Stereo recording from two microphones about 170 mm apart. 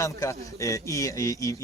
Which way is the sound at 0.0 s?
20° left (ahead or behind).